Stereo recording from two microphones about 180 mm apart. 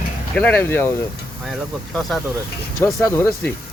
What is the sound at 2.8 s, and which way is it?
Speech, 15° left (ahead or behind).